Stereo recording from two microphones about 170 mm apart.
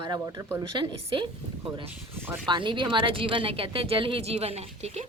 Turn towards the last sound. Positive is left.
turn(degrees=-40)  # may be behind; listen again after turning